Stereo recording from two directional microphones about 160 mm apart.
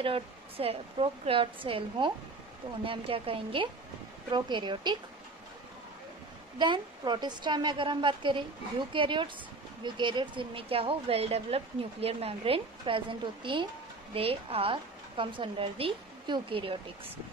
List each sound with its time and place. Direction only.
0.0 s a woman's voice: 35° right (ahead or behind)
6.6 s a woman's voice: 30° right (ahead or behind)